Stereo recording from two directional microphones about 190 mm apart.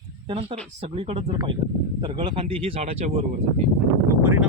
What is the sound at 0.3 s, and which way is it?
Speech, 30° right (ahead or behind).